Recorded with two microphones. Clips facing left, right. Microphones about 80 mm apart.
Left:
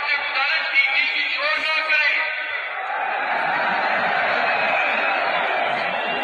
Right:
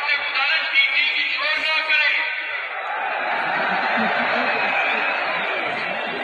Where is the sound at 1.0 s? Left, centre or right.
Left.